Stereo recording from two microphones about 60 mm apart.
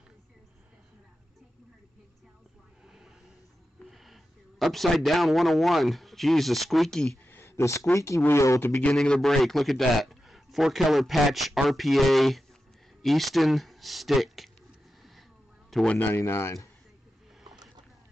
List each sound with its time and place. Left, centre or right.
3.8 s speech: centre
7.2 s a sound: left
7.9 s speech: left
9.0 s a man's voice: centre
15.9 s speech: left
16.2 s speech: left